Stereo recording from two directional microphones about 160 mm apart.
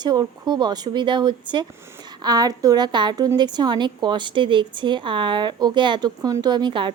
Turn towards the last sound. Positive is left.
turn(degrees=-30)  # may be behind; listen again after turning